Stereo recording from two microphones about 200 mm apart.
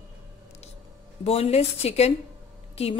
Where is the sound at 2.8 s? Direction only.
30° left (ahead or behind).